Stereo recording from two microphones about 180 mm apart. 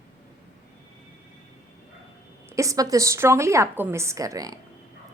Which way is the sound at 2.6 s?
20° right (ahead or behind).